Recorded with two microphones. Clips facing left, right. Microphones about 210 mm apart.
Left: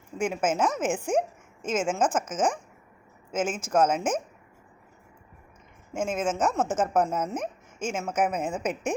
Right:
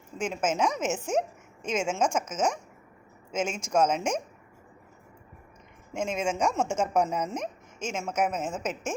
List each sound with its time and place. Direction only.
0.2 s speech: 10° left (ahead or behind)
5.9 s speech: 5° left (ahead or behind)
8.4 s a woman's voice: 60° left (ahead or behind)